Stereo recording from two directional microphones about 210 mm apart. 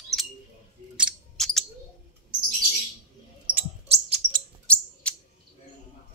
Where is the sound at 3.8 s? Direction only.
30° right (ahead or behind).